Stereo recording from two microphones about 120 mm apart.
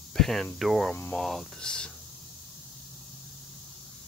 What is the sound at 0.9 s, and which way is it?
Speech, 10° left (ahead or behind).